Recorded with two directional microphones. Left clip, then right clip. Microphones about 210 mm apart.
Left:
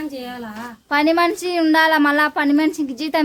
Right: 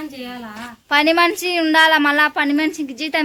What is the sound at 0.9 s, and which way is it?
A woman's voice, centre (ahead or behind).